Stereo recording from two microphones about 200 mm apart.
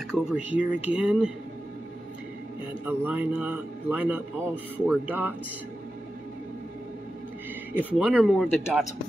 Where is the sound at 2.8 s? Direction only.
10° right (ahead or behind).